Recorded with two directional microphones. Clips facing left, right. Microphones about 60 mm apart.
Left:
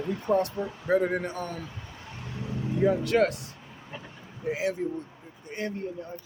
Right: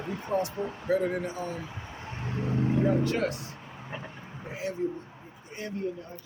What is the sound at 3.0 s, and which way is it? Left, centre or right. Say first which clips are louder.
Speech: left 5 dB; left.